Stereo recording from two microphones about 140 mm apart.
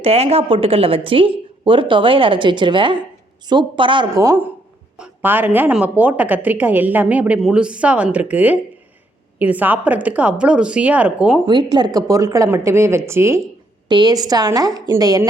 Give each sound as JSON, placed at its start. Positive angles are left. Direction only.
{"t": 0.0, "sound": "a woman's voice", "side_deg": -45}
{"t": 4.1, "sound": "a woman's voice", "side_deg": -20}
{"t": 11.4, "sound": "speech", "side_deg": -30}
{"t": 13.8, "sound": "speech", "side_deg": -30}